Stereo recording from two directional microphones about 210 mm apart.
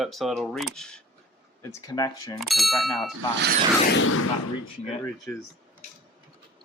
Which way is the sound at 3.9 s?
80° left.